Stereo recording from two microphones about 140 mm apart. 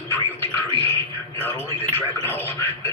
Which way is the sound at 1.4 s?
15° left (ahead or behind).